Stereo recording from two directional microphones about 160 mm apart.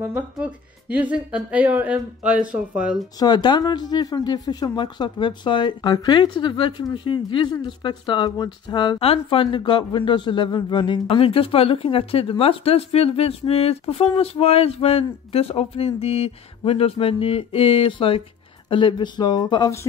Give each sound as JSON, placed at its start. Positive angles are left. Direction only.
{"t": 0.0, "sound": "speech", "side_deg": -10}
{"t": 3.2, "sound": "speech", "side_deg": 25}